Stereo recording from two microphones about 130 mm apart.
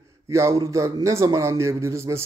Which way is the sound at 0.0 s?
20° right (ahead or behind).